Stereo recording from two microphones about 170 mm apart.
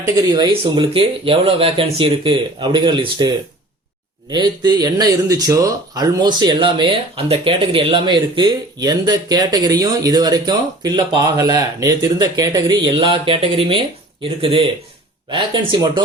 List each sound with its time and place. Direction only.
0.0 s speech: 25° right (ahead or behind)